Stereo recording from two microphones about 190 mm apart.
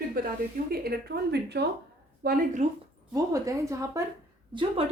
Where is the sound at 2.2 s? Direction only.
40° right (ahead or behind).